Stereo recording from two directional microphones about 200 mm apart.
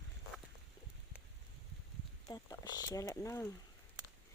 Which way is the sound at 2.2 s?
20° left (ahead or behind).